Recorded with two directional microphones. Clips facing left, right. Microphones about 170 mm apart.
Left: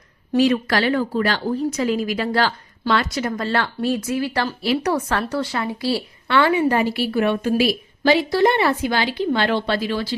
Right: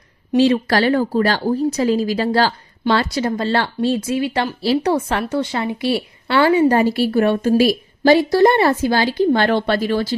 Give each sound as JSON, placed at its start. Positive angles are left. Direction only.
{"t": 0.3, "sound": "a woman's voice", "side_deg": -30}